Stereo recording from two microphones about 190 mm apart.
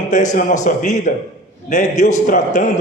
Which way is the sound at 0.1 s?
40° left (ahead or behind).